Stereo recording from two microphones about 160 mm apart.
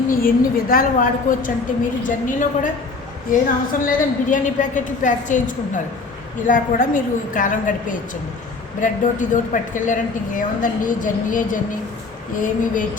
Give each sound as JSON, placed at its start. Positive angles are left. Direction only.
{"t": 0.1, "sound": "a woman's voice", "side_deg": 60}